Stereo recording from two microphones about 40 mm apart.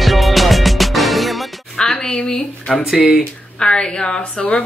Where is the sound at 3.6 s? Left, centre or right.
Left.